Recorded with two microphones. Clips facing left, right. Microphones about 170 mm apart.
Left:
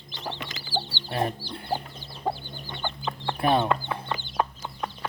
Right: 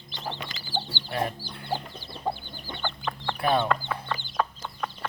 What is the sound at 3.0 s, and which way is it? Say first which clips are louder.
Chicken: left 2 dB; 25° left (ahead or behind).